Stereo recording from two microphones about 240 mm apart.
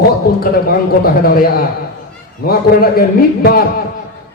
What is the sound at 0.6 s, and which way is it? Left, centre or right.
A man's voice, left.